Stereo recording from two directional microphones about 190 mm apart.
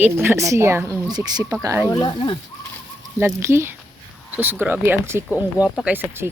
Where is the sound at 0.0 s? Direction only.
10° right (ahead or behind).